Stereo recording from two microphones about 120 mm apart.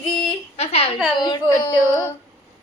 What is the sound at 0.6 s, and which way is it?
Speech, 60° left (ahead or behind).